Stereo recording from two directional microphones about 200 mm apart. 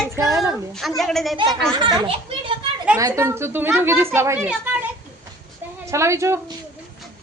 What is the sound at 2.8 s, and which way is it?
A woman's voice, 10° right (ahead or behind).